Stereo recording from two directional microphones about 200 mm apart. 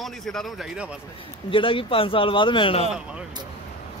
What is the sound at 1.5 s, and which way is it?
Speech, 25° left (ahead or behind).